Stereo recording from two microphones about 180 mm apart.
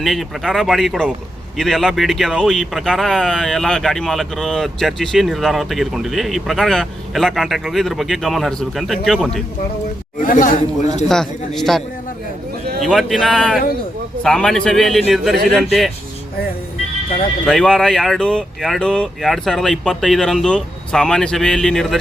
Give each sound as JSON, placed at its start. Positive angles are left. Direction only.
{"t": 0.0, "sound": "speech", "side_deg": 0}
{"t": 10.2, "sound": "speech", "side_deg": 50}
{"t": 11.1, "sound": "speech", "side_deg": 0}
{"t": 12.8, "sound": "speech", "side_deg": 0}
{"t": 17.4, "sound": "speech", "side_deg": 0}